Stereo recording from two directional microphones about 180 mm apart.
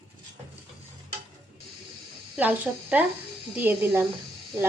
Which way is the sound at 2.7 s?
5° right (ahead or behind).